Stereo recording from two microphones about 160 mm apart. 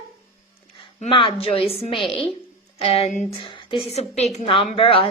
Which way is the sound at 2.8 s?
40° left (ahead or behind).